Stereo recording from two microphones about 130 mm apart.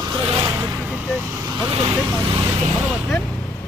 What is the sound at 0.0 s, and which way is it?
Vehicle, 30° right (ahead or behind).